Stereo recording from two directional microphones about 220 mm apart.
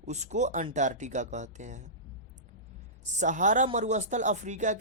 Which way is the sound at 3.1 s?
35° right (ahead or behind).